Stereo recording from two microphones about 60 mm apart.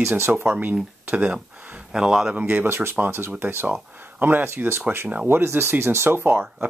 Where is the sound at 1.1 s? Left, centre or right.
Right.